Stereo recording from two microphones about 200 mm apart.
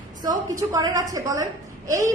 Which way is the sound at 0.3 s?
15° right (ahead or behind).